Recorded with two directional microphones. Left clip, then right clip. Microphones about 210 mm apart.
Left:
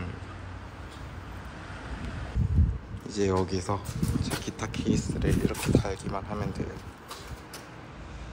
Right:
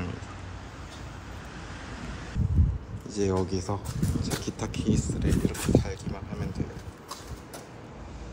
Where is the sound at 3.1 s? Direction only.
15° right (ahead or behind).